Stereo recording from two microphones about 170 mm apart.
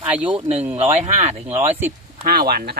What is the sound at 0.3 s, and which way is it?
Speech, 35° right (ahead or behind).